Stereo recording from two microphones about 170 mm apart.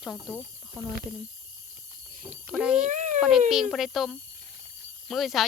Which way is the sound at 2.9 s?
45° right (ahead or behind).